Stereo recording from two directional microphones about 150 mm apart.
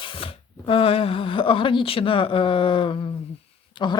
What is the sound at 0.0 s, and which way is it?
Speech, 35° left (ahead or behind).